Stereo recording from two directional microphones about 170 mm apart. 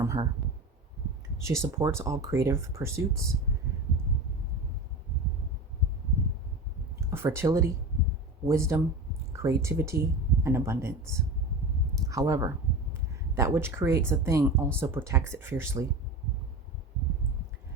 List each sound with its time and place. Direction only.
0.0 s a sound: 20° right (ahead or behind)
1.4 s speech: 15° right (ahead or behind)
7.0 s speech: 15° right (ahead or behind)
12.0 s speech: 20° right (ahead or behind)